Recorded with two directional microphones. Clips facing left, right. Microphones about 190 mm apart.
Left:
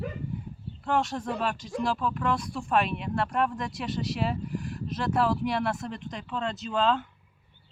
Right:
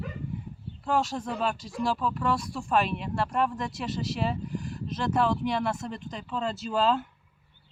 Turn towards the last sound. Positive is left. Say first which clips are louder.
# right 1 dB
turn(degrees=-5)  # may be behind; listen again after turning